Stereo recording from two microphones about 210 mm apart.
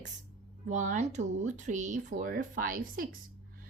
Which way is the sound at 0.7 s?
35° right (ahead or behind).